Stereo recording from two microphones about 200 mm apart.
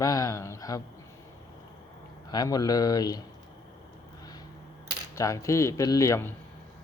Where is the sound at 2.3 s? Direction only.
20° left (ahead or behind).